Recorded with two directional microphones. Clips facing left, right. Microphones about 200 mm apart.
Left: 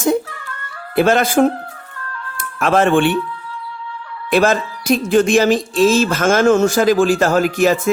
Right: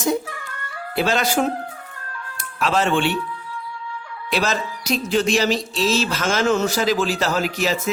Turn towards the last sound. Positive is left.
turn(degrees=50)  # may be behind; listen again after turning